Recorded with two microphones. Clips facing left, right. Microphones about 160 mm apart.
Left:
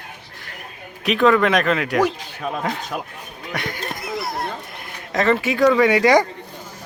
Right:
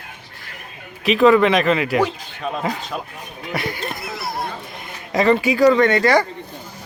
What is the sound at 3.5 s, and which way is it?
Speech, 5° right (ahead or behind).